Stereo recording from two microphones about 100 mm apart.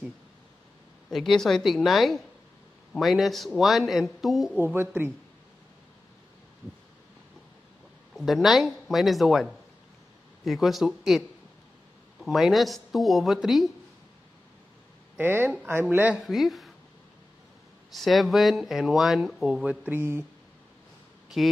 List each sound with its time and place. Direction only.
1.1 s speech: centre (ahead or behind)
4.6 s speech: 20° right (ahead or behind)
8.2 s speech: centre (ahead or behind)
15.1 s a woman's voice: 20° right (ahead or behind)
16.2 s speech: centre (ahead or behind)
17.9 s speech: centre (ahead or behind)
19.9 s speech: 20° right (ahead or behind)
21.4 s speech: centre (ahead or behind)